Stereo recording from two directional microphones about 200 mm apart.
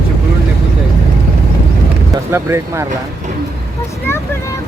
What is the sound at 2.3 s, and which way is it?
Speech, 15° right (ahead or behind).